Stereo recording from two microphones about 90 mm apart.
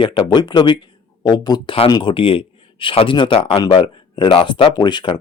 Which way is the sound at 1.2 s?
50° left (ahead or behind).